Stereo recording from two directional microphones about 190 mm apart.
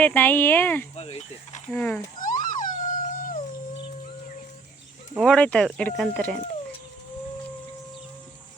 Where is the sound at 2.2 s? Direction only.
45° left (ahead or behind).